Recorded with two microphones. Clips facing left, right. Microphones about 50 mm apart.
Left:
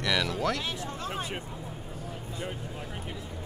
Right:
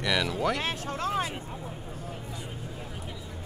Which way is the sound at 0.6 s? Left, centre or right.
Right.